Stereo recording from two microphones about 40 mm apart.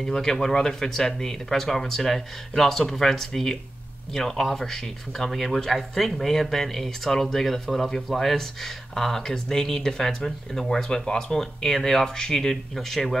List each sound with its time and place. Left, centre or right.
0.0 s speech: centre